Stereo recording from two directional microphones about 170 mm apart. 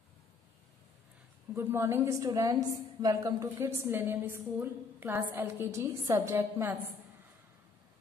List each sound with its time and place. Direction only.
1.5 s a woman's voice: 15° right (ahead or behind)